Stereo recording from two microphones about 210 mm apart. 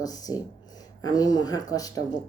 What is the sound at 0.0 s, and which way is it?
Speech, 15° left (ahead or behind).